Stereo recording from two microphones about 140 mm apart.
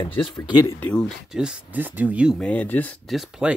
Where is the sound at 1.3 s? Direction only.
5° right (ahead or behind).